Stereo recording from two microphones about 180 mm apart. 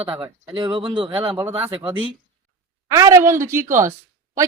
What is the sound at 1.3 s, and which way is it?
Speech, 10° right (ahead or behind).